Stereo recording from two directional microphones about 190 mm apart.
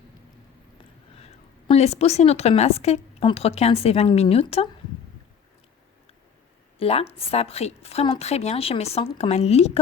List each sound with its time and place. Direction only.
1.2 s a woman's voice: 35° left (ahead or behind)
6.7 s a woman's voice: 30° left (ahead or behind)